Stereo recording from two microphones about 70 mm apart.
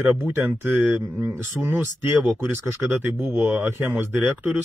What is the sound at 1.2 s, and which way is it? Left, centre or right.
Speech, right.